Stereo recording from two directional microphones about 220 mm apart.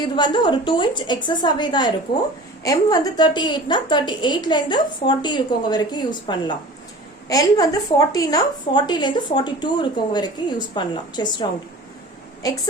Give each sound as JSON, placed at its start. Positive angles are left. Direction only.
{"t": 0.0, "sound": "a woman's voice", "side_deg": 20}